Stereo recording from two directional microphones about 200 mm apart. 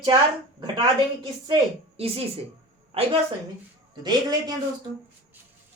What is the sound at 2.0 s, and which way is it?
A woman's voice, 30° right (ahead or behind).